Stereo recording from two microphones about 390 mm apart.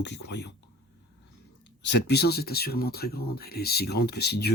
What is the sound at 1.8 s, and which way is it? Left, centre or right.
Speech, left.